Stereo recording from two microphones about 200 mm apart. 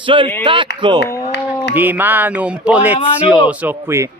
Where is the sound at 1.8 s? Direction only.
10° right (ahead or behind).